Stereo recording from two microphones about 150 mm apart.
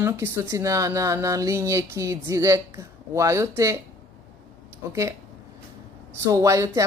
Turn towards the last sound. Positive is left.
turn(degrees=-20)  # may be behind; listen again after turning